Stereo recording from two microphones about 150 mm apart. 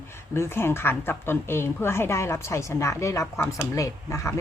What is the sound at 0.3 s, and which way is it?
A woman's voice, 15° left (ahead or behind).